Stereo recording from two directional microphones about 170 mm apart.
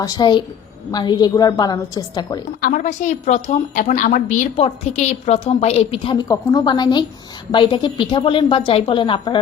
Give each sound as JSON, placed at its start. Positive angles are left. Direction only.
{"t": 0.0, "sound": "speech", "side_deg": 25}
{"t": 2.6, "sound": "a woman's voice", "side_deg": 55}